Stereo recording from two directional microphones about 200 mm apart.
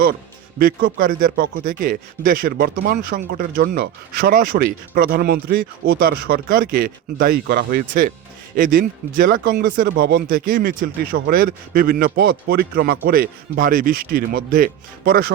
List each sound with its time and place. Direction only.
0.6 s speech: 45° right (ahead or behind)